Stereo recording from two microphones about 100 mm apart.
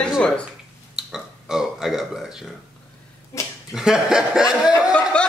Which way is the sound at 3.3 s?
30° left (ahead or behind).